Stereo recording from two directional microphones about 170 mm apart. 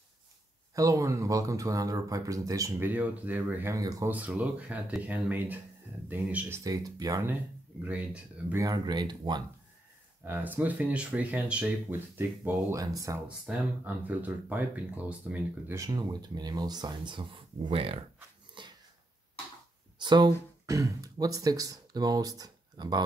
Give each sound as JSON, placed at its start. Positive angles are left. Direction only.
{"t": 0.7, "sound": "speech", "side_deg": -20}
{"t": 4.1, "sound": "speech", "side_deg": -10}
{"t": 8.6, "sound": "speech", "side_deg": -25}
{"t": 10.2, "sound": "speech", "side_deg": -10}
{"t": 13.5, "sound": "speech", "side_deg": -10}
{"t": 18.6, "sound": "a sound", "side_deg": -30}
{"t": 20.0, "sound": "speech", "side_deg": -25}